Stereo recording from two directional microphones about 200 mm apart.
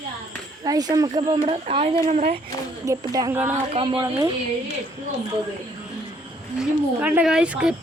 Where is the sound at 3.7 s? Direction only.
25° right (ahead or behind).